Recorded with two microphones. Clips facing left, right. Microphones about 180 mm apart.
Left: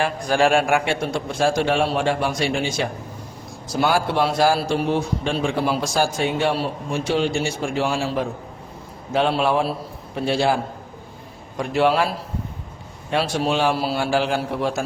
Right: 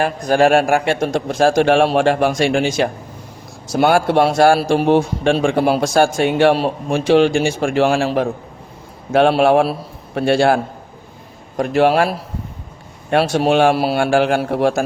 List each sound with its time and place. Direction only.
0.0 s a man's voice: 45° right (ahead or behind)
1.6 s a man's voice: 75° right (ahead or behind)
3.7 s a man's voice: 60° right (ahead or behind); by 4.9 s 80° right
4.9 s a man's voice: 60° right (ahead or behind)
13.1 s a man's voice: 65° right (ahead or behind)